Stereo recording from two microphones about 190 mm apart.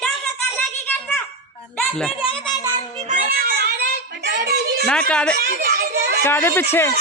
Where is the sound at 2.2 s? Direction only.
30° left (ahead or behind).